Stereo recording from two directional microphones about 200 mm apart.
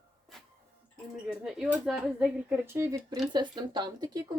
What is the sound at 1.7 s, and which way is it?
Speech, 5° right (ahead or behind).